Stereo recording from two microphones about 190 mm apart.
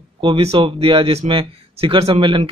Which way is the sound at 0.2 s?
30° right (ahead or behind).